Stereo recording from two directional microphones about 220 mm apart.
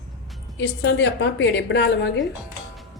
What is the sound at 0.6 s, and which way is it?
A woman's voice, 55° left (ahead or behind).